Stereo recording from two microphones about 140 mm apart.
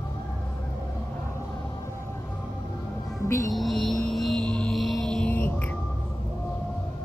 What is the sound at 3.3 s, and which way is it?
Music, 25° left (ahead or behind).